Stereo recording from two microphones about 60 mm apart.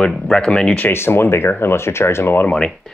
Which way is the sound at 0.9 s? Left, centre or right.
Left.